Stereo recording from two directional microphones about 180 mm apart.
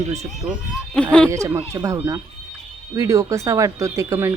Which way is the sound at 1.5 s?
20° right (ahead or behind).